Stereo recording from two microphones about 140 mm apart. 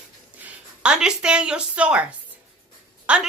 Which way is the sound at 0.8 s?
5° right (ahead or behind).